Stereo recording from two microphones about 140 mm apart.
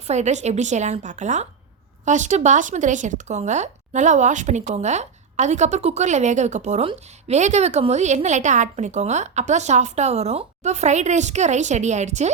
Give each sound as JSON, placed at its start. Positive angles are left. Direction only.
{"t": 0.1, "sound": "speech", "side_deg": -55}